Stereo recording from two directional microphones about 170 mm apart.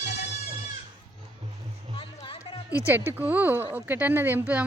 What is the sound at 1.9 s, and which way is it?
Music, 30° left (ahead or behind).